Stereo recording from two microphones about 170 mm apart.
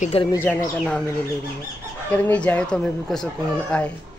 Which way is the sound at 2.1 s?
10° left (ahead or behind).